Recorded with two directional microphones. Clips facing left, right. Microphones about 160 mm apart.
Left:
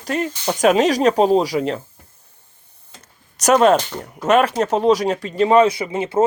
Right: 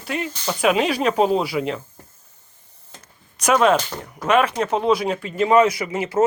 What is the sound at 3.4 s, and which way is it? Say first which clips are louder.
Speech: left 3 dB; 40° left (ahead or behind).